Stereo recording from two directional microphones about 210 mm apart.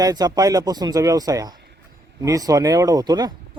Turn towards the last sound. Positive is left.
turn(degrees=-20)  # may be behind; listen again after turning